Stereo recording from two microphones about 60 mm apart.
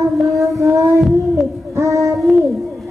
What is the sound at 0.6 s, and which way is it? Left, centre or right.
Child singing, right.